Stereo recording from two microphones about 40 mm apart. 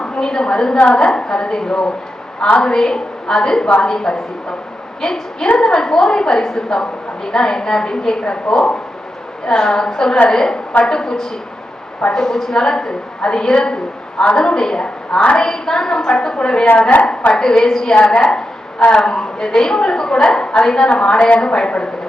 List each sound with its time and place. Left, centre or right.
0.0 s a woman's voice: centre
0.8 s a woman's voice: left